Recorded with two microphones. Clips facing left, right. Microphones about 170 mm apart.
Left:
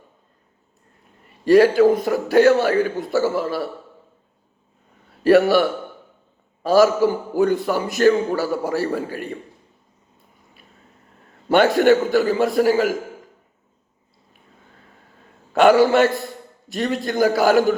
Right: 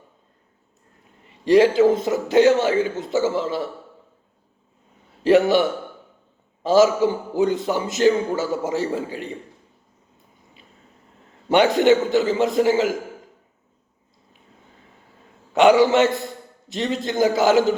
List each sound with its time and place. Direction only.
1.5 s a man's voice: 20° right (ahead or behind)
5.2 s a man's voice: 20° right (ahead or behind)
11.4 s a man's voice: 20° right (ahead or behind)
15.5 s a man's voice: 20° right (ahead or behind)